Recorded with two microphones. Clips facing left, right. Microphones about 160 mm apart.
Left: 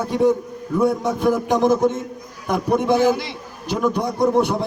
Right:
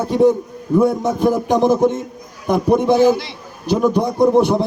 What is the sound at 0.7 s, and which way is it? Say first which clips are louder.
Speech: right 4 dB; 20° right (ahead or behind).